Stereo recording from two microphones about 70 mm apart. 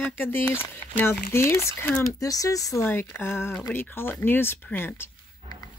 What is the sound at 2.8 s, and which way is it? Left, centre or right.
Speech, left.